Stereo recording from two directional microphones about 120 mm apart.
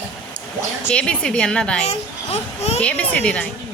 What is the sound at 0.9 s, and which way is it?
Speech, 10° left (ahead or behind).